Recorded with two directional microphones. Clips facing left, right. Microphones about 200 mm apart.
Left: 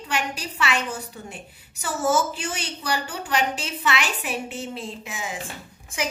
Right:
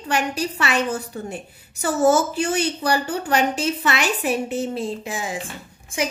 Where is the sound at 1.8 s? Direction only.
40° right (ahead or behind).